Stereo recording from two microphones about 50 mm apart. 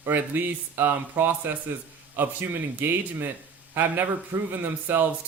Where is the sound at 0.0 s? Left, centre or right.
Right.